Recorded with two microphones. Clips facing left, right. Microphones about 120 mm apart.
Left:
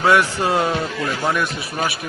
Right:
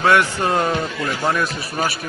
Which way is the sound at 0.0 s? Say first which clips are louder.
Even; 15° left (ahead or behind).